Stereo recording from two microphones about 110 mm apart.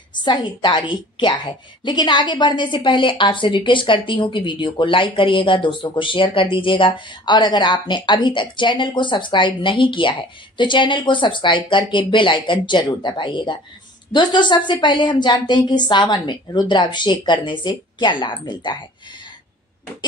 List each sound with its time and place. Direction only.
0.2 s a woman's voice: 45° left (ahead or behind)